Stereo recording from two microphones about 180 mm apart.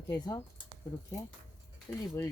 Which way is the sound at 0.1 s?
20° left (ahead or behind).